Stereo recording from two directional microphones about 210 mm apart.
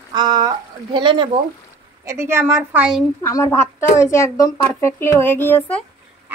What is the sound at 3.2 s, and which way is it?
Speech, 15° left (ahead or behind).